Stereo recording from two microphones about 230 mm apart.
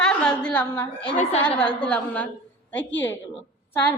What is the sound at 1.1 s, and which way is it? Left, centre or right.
Speech, left.